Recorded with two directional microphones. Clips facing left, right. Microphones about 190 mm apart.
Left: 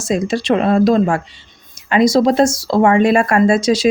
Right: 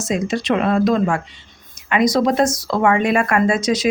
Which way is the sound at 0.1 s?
30° left (ahead or behind).